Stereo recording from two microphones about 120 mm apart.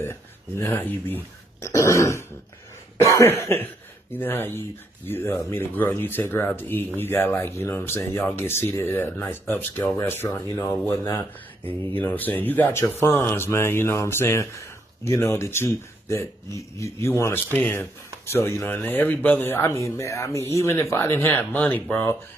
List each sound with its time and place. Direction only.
0.0 s speech: 20° left (ahead or behind)
1.6 s throat clearing: 25° left (ahead or behind)
3.0 s speech: 25° left (ahead or behind)